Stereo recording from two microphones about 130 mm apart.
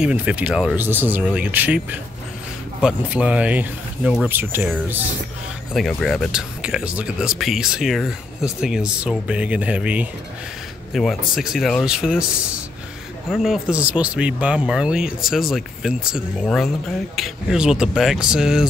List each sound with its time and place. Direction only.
0.0 s speech: 10° right (ahead or behind)
5.7 s speech: centre (ahead or behind)
10.9 s speech: centre (ahead or behind)